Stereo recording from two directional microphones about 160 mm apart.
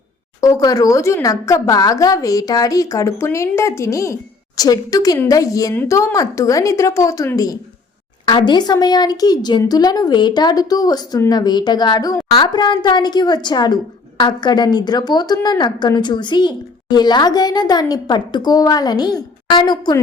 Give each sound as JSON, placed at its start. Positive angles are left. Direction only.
{"t": 0.4, "sound": "a woman's voice", "side_deg": 20}